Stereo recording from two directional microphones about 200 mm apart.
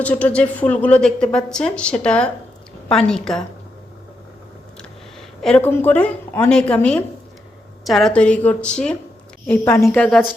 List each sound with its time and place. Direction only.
0.0 s a woman's voice: 5° left (ahead or behind)
5.4 s a woman's voice: 5° left (ahead or behind)